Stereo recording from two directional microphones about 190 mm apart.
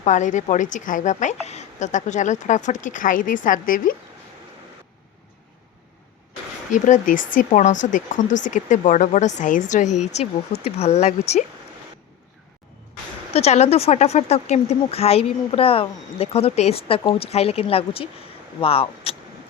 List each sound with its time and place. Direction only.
0.0 s speech: 40° left (ahead or behind)
6.7 s speech: 40° left (ahead or behind)
13.3 s speech: 35° left (ahead or behind)